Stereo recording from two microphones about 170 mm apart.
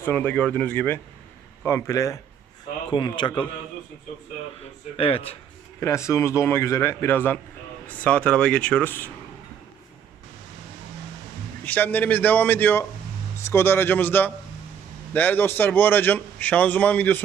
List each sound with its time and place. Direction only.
0.0 s a man's voice: 10° left (ahead or behind); by 3.4 s 25° left (ahead or behind)
4.9 s speech: 35° left (ahead or behind)
5.8 s a man's voice: 15° left (ahead or behind)
11.6 s a man's voice: 10° left (ahead or behind)